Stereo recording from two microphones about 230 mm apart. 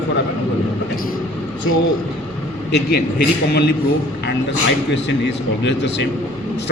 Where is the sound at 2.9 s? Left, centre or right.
Left.